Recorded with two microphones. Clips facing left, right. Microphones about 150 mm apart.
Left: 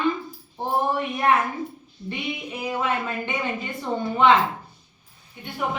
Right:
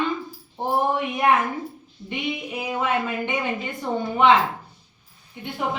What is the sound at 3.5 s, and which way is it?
Speech, centre (ahead or behind).